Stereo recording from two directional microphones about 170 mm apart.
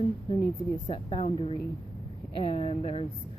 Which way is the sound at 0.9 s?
35° left (ahead or behind).